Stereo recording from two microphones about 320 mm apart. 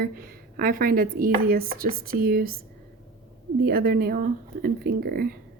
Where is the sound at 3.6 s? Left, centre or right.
Right.